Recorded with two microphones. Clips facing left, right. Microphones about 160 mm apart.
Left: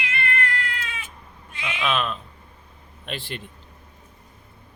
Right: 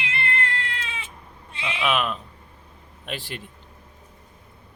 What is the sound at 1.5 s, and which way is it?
Speech, 30° right (ahead or behind).